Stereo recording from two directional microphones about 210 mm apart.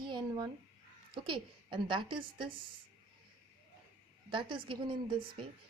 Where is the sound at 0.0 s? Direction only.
20° right (ahead or behind).